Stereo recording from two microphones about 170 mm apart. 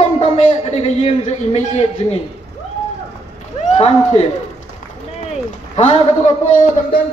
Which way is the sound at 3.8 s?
40° left (ahead or behind).